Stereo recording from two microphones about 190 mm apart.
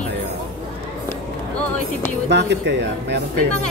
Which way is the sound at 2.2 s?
65° right (ahead or behind).